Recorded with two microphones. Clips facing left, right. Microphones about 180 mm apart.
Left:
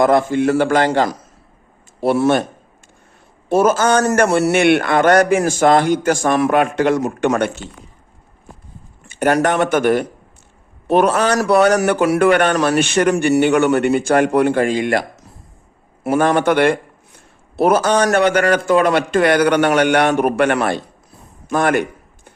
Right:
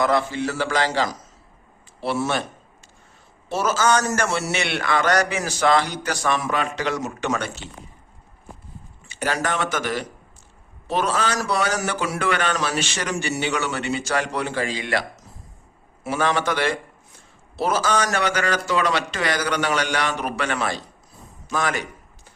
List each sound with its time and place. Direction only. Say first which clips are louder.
0.0 s a man's voice: left 8 dB; 50° left (ahead or behind)
3.5 s a man's voice: left 7 dB; 55° left (ahead or behind)
9.0 s a man's voice: left 10 dB; 55° left (ahead or behind)
21.4 s a sound: left 9 dB; 55° left (ahead or behind)